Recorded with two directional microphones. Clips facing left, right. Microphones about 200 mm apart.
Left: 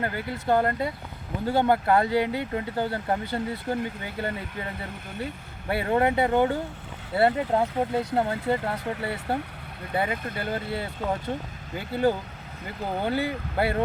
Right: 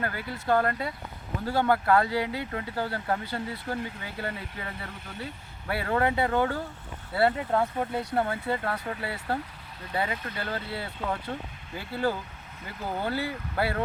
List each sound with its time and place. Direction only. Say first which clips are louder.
0.0 s speech: left 3 dB; 20° left (ahead or behind)
5.6 s speech: left 3 dB; 20° left (ahead or behind)
13.0 s speech: left 4 dB; 20° left (ahead or behind)